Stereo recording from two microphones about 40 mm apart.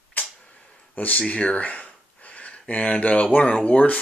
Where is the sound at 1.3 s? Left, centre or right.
Left.